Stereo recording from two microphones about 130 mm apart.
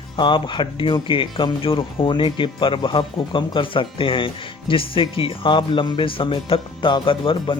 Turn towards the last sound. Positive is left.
turn(degrees=40)  # may be behind; listen again after turning